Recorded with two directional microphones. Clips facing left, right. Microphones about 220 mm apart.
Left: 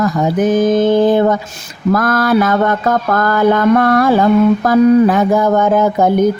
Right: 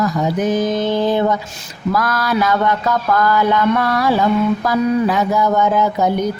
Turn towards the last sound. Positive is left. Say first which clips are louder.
# left 5 dB
turn(degrees=50)  # may be behind; listen again after turning